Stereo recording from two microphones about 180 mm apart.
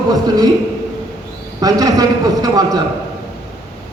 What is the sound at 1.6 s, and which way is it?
A man's voice, 20° right (ahead or behind).